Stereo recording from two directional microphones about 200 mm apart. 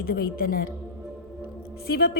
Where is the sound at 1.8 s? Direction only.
50° left (ahead or behind).